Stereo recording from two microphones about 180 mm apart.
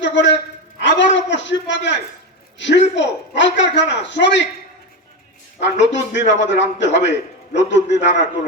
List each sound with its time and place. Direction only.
0.0 s a sound: 80° left
2.6 s a man's voice: 80° left
5.5 s a man's voice: 80° left